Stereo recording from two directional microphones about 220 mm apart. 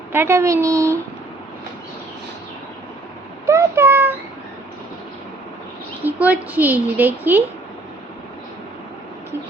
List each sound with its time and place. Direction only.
0.1 s a child's voice: 10° right (ahead or behind)
3.4 s a child's voice: 15° right (ahead or behind)
6.1 s a child's voice: 10° right (ahead or behind)